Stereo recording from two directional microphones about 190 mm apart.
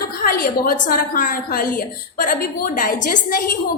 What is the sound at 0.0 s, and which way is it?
A woman's voice, 50° left (ahead or behind).